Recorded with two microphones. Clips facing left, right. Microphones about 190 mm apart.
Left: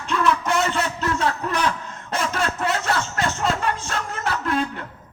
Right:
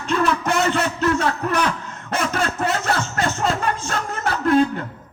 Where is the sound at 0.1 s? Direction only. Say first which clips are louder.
Right 1 dB; 50° right (ahead or behind).